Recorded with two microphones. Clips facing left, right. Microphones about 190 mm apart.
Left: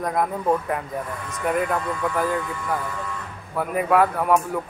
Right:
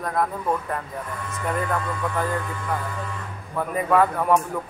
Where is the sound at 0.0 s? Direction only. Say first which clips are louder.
Left 2 dB; 15° left (ahead or behind).